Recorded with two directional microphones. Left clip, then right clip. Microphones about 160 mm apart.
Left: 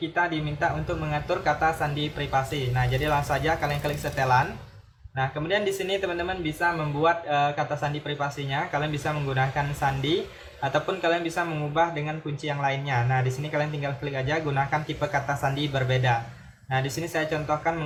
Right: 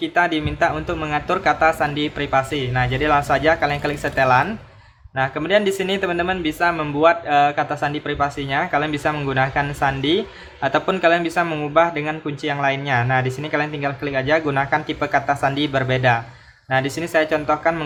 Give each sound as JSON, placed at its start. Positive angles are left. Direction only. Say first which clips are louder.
{"t": 0.1, "sound": "speech", "louder": "right 8 dB", "side_deg": -50}